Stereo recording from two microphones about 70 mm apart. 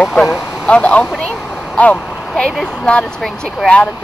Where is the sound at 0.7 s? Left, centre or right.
Centre.